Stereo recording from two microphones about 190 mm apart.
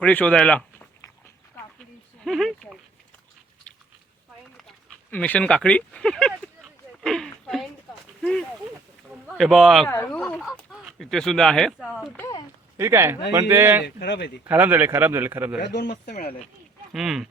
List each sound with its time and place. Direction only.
0.0 s speech: 10° left (ahead or behind)
2.2 s speech: centre (ahead or behind)
5.1 s speech: 10° left (ahead or behind)
7.0 s a sound: 5° left (ahead or behind)
9.2 s speech: centre (ahead or behind)
12.7 s speech: 15° right (ahead or behind)
13.8 s speech: 60° left (ahead or behind)
14.4 s speech: 10° right (ahead or behind)
15.7 s speech: 60° left (ahead or behind)
16.9 s speech: centre (ahead or behind)